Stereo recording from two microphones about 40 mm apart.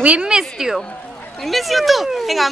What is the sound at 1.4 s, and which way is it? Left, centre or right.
Speech, centre.